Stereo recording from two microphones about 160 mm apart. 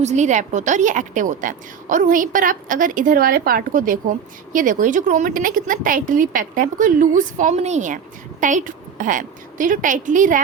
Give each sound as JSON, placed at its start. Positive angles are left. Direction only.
{"t": 0.0, "sound": "a woman's voice", "side_deg": -45}